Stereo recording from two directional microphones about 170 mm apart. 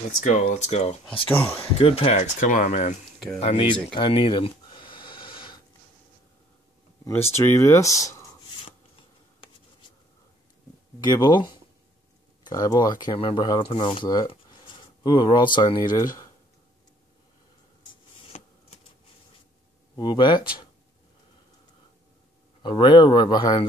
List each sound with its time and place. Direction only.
0.2 s speech: 45° left (ahead or behind)
2.4 s speech: 50° left (ahead or behind)
3.3 s speech: 35° left (ahead or behind)
3.9 s a sound: 30° left (ahead or behind)
7.1 s speech: 15° left (ahead or behind)
11.0 s speech: 25° left (ahead or behind)
18.3 s a sound: 40° left (ahead or behind)
20.0 s speech: 30° left (ahead or behind)
22.6 s speech: 30° left (ahead or behind)